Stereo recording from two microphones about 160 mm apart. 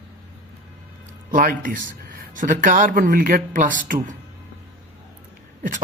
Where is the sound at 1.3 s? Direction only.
60° right (ahead or behind).